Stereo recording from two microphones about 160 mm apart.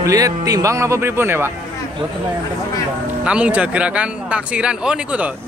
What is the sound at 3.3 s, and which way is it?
Speech, 5° right (ahead or behind).